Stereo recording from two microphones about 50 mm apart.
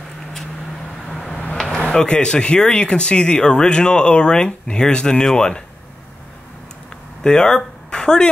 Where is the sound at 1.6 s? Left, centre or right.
Centre.